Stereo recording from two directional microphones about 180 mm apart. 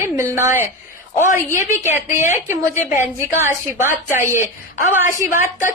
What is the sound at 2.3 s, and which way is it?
A woman's voice, 15° right (ahead or behind).